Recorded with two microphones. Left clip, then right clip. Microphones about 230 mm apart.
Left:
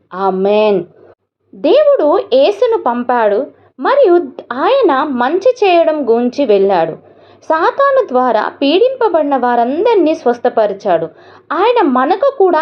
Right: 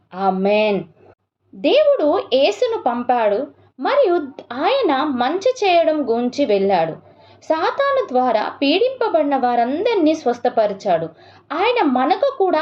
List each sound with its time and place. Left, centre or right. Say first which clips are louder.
0.1 s speech: left 5 dB; centre